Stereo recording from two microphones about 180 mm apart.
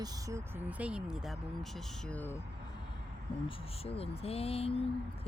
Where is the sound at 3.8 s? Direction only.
30° left (ahead or behind).